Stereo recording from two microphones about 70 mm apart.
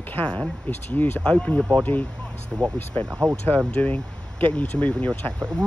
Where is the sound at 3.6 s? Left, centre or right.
Left.